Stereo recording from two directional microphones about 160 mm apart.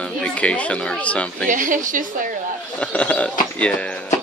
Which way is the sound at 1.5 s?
55° right (ahead or behind).